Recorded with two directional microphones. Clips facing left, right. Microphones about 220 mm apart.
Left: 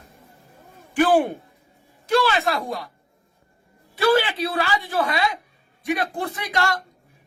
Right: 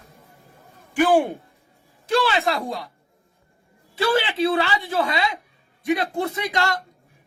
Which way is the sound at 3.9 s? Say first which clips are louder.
Left 2 dB; 25° right (ahead or behind).